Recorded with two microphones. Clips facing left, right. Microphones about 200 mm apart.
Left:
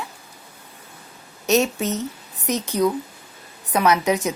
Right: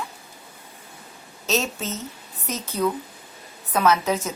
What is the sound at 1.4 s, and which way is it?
A woman's voice, 15° left (ahead or behind).